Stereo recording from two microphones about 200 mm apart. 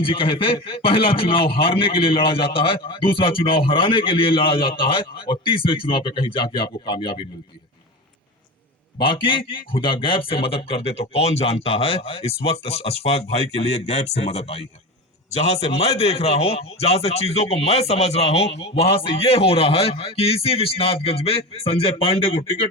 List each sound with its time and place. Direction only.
0.0 s a man's voice: 25° left (ahead or behind)
9.0 s a man's voice: 25° left (ahead or behind)